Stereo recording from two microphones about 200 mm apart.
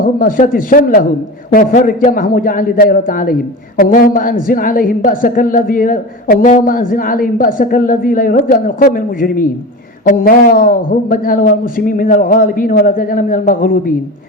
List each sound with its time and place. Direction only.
0.0 s a woman's voice: 45° left (ahead or behind)